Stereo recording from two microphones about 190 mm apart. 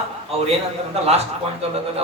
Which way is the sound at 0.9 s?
35° right (ahead or behind).